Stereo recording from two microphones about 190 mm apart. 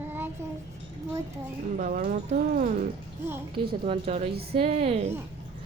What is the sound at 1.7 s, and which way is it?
Speech, 45° right (ahead or behind).